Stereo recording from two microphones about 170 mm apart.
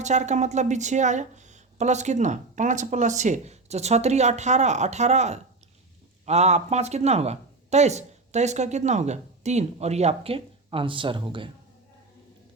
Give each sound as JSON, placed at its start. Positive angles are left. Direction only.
{"t": 0.0, "sound": "speech", "side_deg": -45}